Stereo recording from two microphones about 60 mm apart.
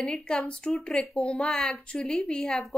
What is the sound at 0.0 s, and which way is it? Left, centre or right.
A woman's voice, centre.